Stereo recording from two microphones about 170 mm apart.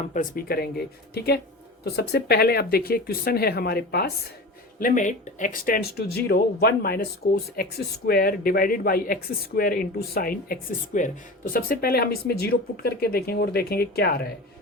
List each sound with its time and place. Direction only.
0.1 s speech: 55° left (ahead or behind)
4.8 s speech: 50° left (ahead or behind); by 14.2 s 65° left (ahead or behind)